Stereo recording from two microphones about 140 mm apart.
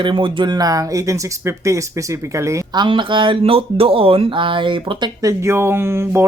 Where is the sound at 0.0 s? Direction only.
35° right (ahead or behind); by 2.8 s 20° right (ahead or behind).